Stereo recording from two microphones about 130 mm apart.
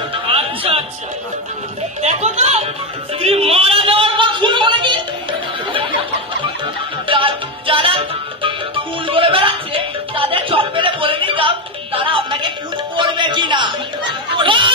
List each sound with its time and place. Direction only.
0.1 s music: 45° right (ahead or behind)
2.0 s a sound: 55° right (ahead or behind); by 5.0 s 40° right (ahead or behind)
7.1 s music: 40° right (ahead or behind)
14.3 s snicker: 40° right (ahead or behind)